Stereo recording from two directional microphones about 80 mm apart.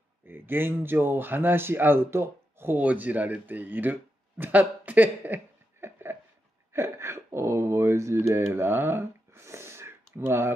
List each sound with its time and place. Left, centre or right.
0.3 s speech: right
2.8 s speech: centre